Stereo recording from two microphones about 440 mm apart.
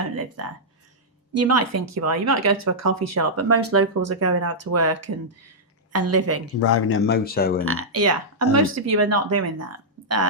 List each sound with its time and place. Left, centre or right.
1.3 s speech: right
6.6 s speech: left
7.6 s speech: right